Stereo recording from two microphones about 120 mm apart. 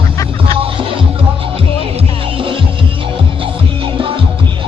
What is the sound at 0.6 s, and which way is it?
Music, 50° right (ahead or behind).